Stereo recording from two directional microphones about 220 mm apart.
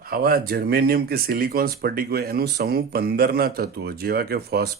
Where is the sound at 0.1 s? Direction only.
45° right (ahead or behind).